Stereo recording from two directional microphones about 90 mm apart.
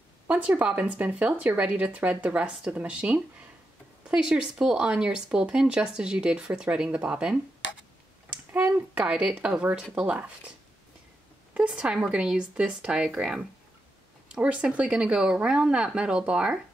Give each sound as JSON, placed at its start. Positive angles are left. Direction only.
{"t": 0.3, "sound": "speech", "side_deg": -15}
{"t": 8.5, "sound": "speech", "side_deg": -25}
{"t": 11.5, "sound": "speech", "side_deg": -15}